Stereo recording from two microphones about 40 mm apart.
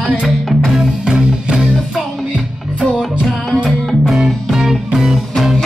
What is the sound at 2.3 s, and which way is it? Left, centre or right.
Music, right.